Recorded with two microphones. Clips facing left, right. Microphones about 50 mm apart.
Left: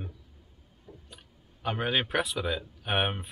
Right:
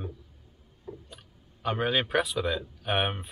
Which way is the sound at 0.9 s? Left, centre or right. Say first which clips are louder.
Right 9 dB; right.